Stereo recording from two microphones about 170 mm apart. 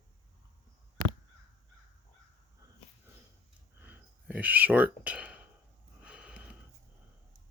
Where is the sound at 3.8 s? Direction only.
10° right (ahead or behind).